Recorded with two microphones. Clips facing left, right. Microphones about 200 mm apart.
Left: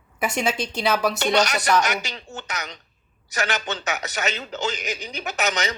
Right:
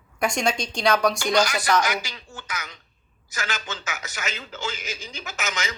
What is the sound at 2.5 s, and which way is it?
Speech, 70° left (ahead or behind).